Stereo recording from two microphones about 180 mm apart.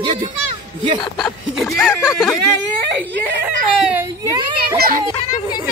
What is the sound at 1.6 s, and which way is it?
Speech, 10° left (ahead or behind).